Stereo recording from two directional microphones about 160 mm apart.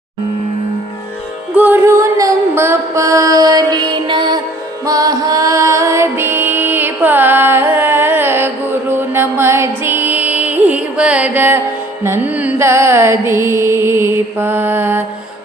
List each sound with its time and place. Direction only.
1.5 s music: 10° right (ahead or behind)
12.0 s carnatic music: 10° right (ahead or behind)